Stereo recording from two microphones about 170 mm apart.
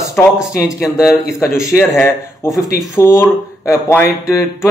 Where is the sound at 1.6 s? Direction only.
15° left (ahead or behind).